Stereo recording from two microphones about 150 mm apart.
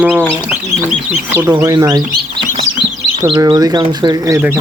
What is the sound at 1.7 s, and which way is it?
Speech, 25° right (ahead or behind).